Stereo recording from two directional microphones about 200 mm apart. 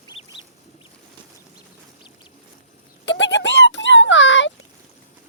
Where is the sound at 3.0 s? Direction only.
65° left (ahead or behind).